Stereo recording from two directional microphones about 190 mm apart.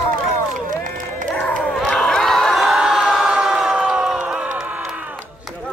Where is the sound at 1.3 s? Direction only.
5° left (ahead or behind).